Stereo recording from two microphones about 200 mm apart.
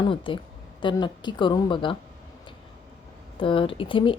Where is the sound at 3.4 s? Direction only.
25° left (ahead or behind).